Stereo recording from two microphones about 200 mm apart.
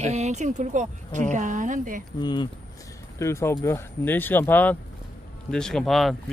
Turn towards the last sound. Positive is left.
turn(degrees=0)  # may be behind; listen again after turning